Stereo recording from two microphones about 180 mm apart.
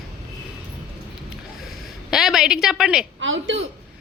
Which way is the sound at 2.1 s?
Centre (ahead or behind).